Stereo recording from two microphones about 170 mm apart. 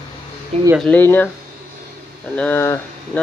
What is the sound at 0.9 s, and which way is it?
Speech, 10° left (ahead or behind).